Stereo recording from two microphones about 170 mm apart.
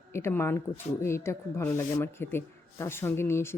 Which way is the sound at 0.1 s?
15° left (ahead or behind).